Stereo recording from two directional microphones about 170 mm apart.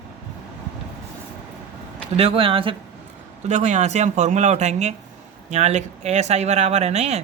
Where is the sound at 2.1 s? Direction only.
35° right (ahead or behind).